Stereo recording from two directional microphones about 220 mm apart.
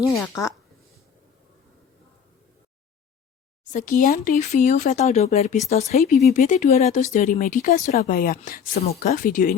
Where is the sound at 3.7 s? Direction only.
35° left (ahead or behind).